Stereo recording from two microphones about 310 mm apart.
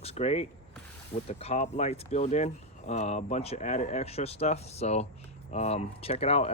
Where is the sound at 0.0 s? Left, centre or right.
Centre.